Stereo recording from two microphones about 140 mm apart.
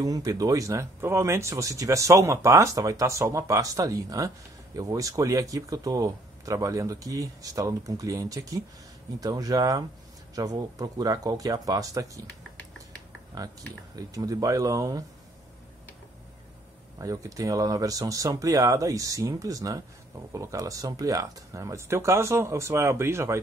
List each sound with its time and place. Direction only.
0.0 s speech: 25° right (ahead or behind)
13.9 s speech: 25° right (ahead or behind)
17.0 s speech: 25° right (ahead or behind)